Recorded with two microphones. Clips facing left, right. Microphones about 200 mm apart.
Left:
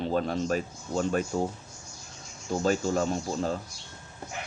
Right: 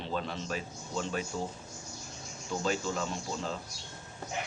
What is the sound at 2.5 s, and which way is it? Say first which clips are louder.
A man's voice: left 6 dB; 45° left (ahead or behind).